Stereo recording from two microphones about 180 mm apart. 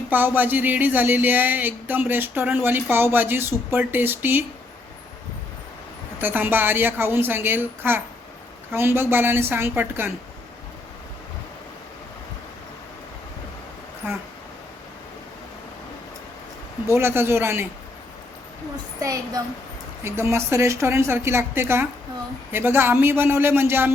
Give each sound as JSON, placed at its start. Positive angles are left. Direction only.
{"t": 0.1, "sound": "speech", "side_deg": -10}
{"t": 6.2, "sound": "speech", "side_deg": -10}
{"t": 14.0, "sound": "speech", "side_deg": -10}
{"t": 16.8, "sound": "speech", "side_deg": -15}
{"t": 18.9, "sound": "a child's voice", "side_deg": -20}